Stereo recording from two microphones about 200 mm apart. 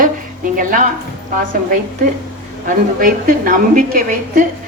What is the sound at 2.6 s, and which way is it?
A woman's voice, 45° right (ahead or behind).